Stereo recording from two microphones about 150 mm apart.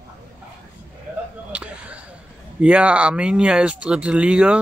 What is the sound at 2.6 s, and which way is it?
Speech, 10° right (ahead or behind).